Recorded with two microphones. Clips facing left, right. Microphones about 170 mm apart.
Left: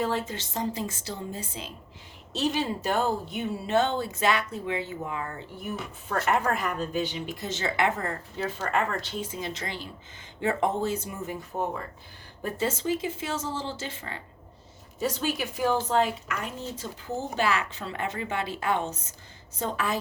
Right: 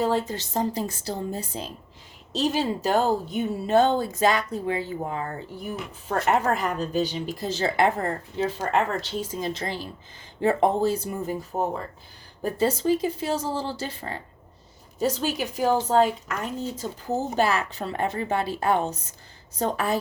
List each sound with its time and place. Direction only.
0.0 s a woman's voice: 35° right (ahead or behind)